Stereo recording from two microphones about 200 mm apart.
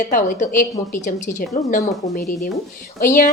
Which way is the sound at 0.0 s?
40° left (ahead or behind).